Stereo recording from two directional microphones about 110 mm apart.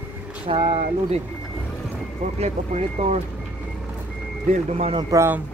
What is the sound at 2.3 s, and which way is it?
Speech, 70° right (ahead or behind).